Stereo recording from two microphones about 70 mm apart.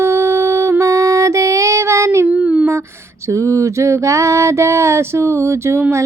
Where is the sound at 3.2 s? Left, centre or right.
Right.